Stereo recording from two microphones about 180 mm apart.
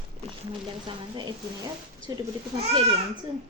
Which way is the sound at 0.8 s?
25° right (ahead or behind).